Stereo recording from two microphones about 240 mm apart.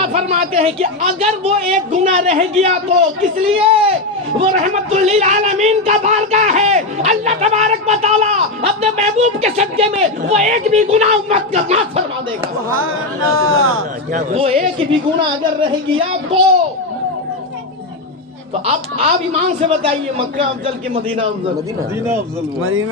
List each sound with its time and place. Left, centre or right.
0.0 s a man's voice: right
13.3 s a man's voice: right
14.1 s a man's voice: right
18.6 s a man's voice: right
22.6 s a man's voice: right